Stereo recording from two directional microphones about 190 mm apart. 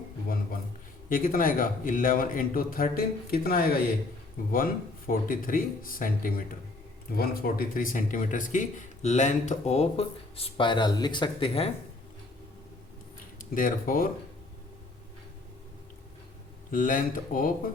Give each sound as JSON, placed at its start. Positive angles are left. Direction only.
{"t": 1.1, "sound": "speech", "side_deg": 45}
{"t": 13.4, "sound": "speech", "side_deg": 45}
{"t": 16.7, "sound": "speech", "side_deg": 45}